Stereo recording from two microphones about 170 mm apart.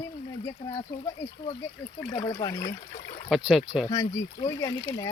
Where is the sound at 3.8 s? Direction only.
20° left (ahead or behind).